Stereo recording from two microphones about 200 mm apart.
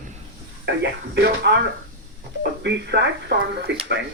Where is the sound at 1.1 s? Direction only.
55° right (ahead or behind).